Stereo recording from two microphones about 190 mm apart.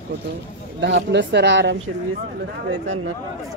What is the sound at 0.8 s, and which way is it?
Speech, 65° right (ahead or behind).